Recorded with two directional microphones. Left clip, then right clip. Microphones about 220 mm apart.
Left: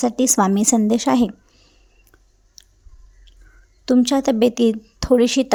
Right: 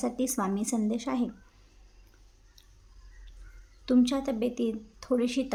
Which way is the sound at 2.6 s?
35° left (ahead or behind).